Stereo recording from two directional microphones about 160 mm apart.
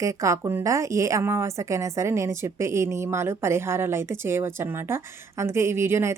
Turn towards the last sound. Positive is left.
turn(degrees=-15)  # may be behind; listen again after turning